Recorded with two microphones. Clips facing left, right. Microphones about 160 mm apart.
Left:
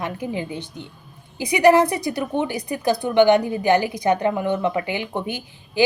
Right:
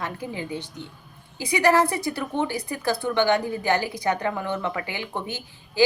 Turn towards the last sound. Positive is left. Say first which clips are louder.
# even
turn(degrees=15)  # may be behind; listen again after turning